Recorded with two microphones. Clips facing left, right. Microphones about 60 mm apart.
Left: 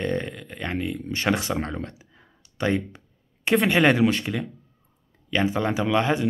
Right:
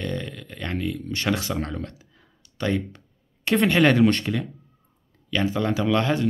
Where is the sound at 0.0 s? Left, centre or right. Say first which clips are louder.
Left 4 dB; left.